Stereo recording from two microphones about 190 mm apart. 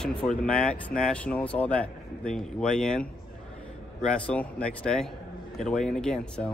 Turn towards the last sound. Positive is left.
turn(degrees=5)  # may be behind; listen again after turning